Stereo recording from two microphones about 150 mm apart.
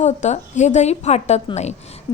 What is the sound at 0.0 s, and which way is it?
A woman's voice, 50° left (ahead or behind).